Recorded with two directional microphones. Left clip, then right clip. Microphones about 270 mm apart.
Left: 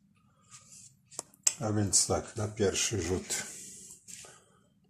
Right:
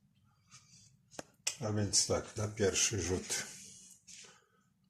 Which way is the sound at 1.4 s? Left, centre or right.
Centre.